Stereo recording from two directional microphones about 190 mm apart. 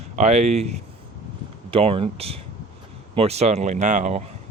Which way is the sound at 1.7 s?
30° right (ahead or behind).